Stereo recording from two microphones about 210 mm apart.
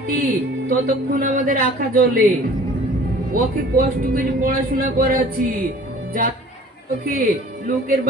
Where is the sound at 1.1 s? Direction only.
40° right (ahead or behind).